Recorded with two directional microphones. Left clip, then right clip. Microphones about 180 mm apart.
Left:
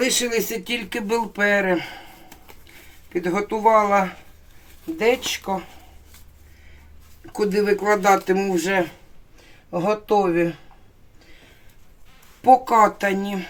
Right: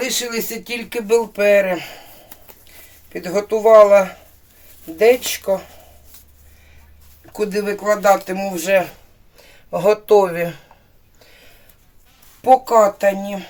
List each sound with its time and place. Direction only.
0.0 s speech: 20° left (ahead or behind)
0.9 s speech: 5° right (ahead or behind)
3.1 s speech: 20° right (ahead or behind)
7.3 s speech: centre (ahead or behind)
9.7 s speech: 50° right (ahead or behind)
12.4 s speech: centre (ahead or behind)